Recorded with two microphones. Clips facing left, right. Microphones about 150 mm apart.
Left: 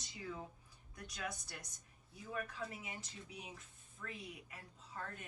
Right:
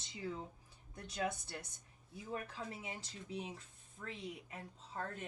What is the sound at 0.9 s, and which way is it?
Speech, 30° right (ahead or behind).